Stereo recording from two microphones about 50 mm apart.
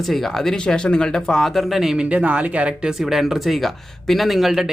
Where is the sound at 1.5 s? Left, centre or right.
Centre.